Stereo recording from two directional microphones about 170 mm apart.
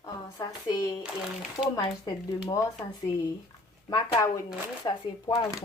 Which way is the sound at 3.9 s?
25° left (ahead or behind).